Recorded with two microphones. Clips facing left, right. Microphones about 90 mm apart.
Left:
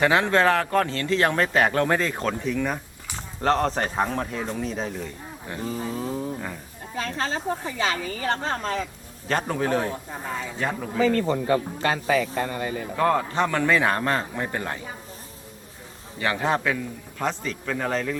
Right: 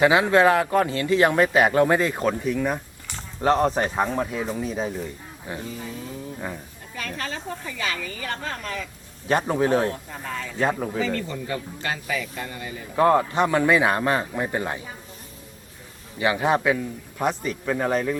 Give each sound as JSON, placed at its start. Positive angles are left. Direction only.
{"t": 0.0, "sound": "a man's voice", "side_deg": -5}
{"t": 5.6, "sound": "a man's voice", "side_deg": 40}
{"t": 7.8, "sound": "a woman's voice", "side_deg": 25}
{"t": 9.3, "sound": "a man's voice", "side_deg": -15}
{"t": 9.9, "sound": "speech", "side_deg": 15}
{"t": 10.9, "sound": "a man's voice", "side_deg": 45}
{"t": 12.5, "sound": "speech", "side_deg": 50}
{"t": 13.0, "sound": "a man's voice", "side_deg": -20}
{"t": 16.1, "sound": "a man's voice", "side_deg": -15}